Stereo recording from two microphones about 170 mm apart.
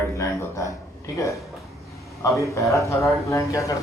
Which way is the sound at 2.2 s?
20° left (ahead or behind).